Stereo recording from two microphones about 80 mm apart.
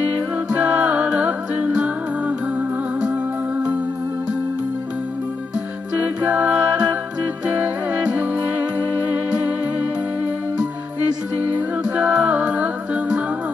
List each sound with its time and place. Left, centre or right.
0.6 s music: centre
5.9 s music: right
11.9 s music: centre